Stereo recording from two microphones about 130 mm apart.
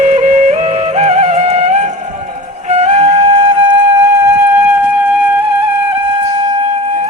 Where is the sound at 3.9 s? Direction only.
20° right (ahead or behind).